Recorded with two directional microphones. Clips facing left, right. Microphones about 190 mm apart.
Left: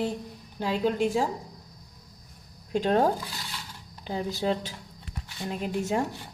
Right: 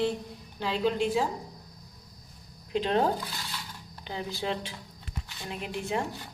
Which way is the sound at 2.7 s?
45° left (ahead or behind).